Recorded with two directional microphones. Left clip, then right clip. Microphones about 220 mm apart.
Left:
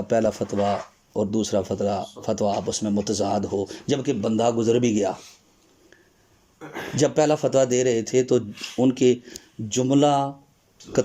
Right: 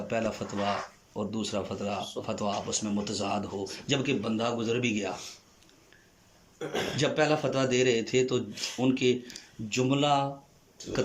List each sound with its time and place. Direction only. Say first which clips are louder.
0.1 s speech: left 10 dB; 25° left (ahead or behind)
6.6 s speech: right 4 dB; 10° right (ahead or behind)
6.9 s speech: left 7 dB; 30° left (ahead or behind)